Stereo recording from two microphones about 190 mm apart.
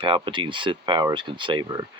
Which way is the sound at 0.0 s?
25° right (ahead or behind).